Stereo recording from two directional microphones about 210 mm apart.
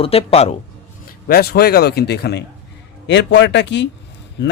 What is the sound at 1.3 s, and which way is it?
Speech, 50° left (ahead or behind).